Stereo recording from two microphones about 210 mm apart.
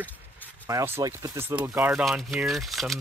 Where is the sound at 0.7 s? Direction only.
15° right (ahead or behind).